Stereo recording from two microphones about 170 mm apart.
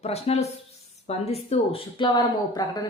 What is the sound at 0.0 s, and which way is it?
Speech, 40° left (ahead or behind).